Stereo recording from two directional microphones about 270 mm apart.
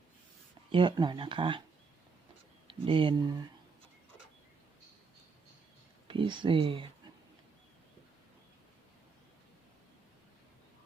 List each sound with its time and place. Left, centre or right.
0.7 s speech: centre
2.6 s speech: centre
6.1 s speech: centre